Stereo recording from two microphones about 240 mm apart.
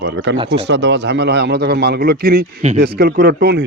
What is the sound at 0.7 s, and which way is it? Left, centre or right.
Speech, right.